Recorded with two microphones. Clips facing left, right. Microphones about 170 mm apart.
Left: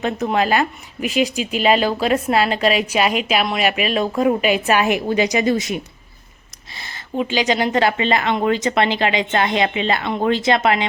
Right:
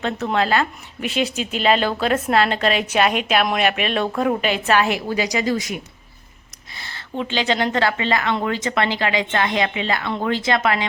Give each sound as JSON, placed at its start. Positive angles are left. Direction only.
{"t": 0.0, "sound": "a woman's voice", "side_deg": 15}